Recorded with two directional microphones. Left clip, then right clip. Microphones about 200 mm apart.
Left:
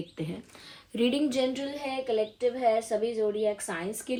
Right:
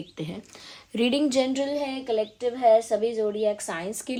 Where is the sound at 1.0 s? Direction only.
35° right (ahead or behind).